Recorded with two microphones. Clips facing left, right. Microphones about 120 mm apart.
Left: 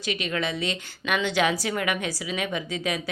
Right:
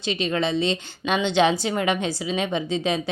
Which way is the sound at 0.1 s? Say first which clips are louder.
Right 5 dB; 30° right (ahead or behind).